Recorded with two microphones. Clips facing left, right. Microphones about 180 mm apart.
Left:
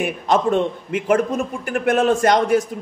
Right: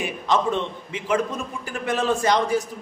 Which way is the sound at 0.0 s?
50° left (ahead or behind).